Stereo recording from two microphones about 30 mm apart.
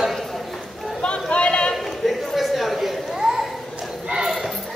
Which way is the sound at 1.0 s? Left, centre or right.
Left.